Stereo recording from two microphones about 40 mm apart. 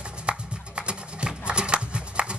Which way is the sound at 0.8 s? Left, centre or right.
Right.